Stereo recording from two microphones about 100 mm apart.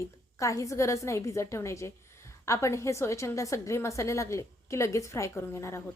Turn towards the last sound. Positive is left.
turn(degrees=25)  # may be behind; listen again after turning